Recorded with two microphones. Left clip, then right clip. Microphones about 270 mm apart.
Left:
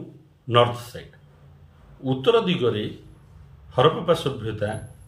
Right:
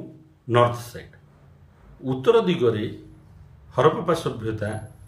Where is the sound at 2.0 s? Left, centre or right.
Centre.